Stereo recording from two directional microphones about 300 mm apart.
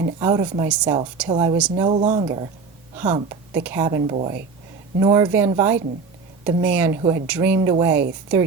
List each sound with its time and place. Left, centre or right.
0.2 s a woman's voice: centre
1.3 s speech: centre